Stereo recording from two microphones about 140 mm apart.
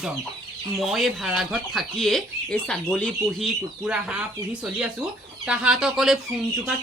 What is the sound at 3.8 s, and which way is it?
Speech, 5° right (ahead or behind).